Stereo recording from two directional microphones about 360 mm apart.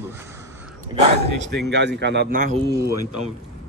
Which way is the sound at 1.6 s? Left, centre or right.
Right.